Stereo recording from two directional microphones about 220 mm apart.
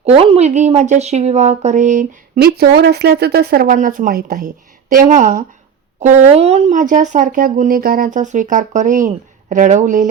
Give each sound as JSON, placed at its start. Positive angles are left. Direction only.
{"t": 0.0, "sound": "speech", "side_deg": -25}